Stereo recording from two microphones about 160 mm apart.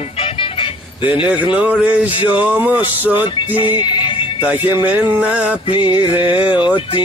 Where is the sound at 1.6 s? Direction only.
5° right (ahead or behind).